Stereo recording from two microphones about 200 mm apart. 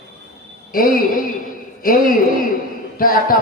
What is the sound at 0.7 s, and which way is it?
A man's voice, 45° left (ahead or behind).